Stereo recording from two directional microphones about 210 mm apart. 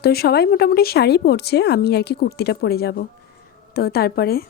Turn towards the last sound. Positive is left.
turn(degrees=45)  # may be behind; listen again after turning